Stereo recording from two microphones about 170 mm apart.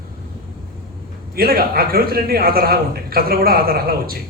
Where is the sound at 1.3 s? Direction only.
60° right (ahead or behind).